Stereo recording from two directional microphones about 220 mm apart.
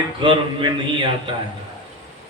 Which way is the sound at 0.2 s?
20° right (ahead or behind).